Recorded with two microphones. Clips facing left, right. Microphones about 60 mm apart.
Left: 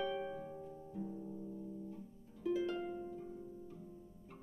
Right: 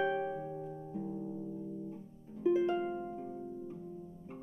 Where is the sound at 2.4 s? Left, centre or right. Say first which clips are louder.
Right 7 dB; right.